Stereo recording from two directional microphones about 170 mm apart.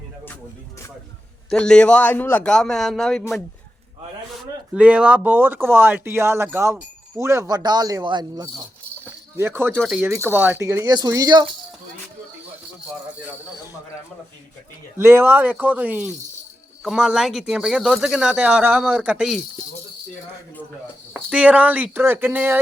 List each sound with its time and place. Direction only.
1.5 s speech: 5° left (ahead or behind)
4.7 s speech: 5° right (ahead or behind); by 8.4 s 25° right (ahead or behind)
9.4 s speech: 10° right (ahead or behind)
14.9 s speech: 15° right (ahead or behind)
21.1 s speech: 5° right (ahead or behind)